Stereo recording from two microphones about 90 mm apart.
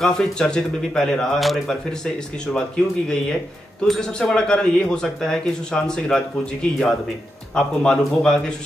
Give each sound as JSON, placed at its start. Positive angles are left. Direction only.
{"t": 0.0, "sound": "speech", "side_deg": 10}